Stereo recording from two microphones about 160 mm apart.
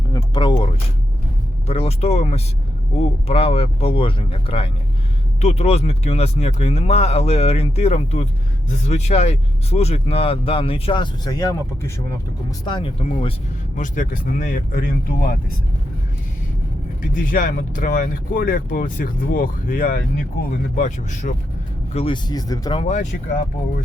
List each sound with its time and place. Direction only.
0.1 s a sound: 25° left (ahead or behind)
1.6 s speech: 40° left (ahead or behind); by 11.9 s 20° left (ahead or behind)
12.6 s speech: 30° left (ahead or behind)
13.7 s speech: 55° left (ahead or behind)
17.0 s speech: 55° left (ahead or behind)
20.7 s speech: 50° left (ahead or behind)
21.9 s speech: 30° left (ahead or behind)
22.8 s speech: 45° left (ahead or behind)